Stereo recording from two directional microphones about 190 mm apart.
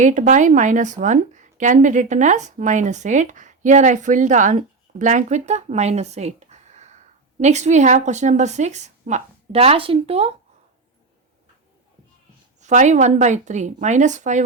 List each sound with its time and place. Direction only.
0.0 s speech: 40° right (ahead or behind)
12.5 s speech: 40° right (ahead or behind)